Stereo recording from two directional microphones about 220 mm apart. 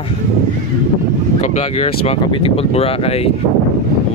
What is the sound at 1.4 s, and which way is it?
Speech, 30° left (ahead or behind).